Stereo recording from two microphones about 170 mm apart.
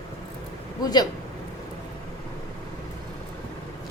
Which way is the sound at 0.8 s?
20° left (ahead or behind).